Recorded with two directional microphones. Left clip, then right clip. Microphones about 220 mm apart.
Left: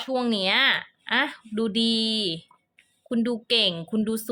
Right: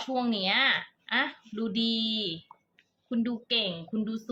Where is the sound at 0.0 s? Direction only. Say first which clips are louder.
Left 4 dB; 50° left (ahead or behind).